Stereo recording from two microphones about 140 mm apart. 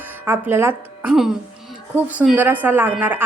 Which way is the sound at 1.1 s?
5° right (ahead or behind).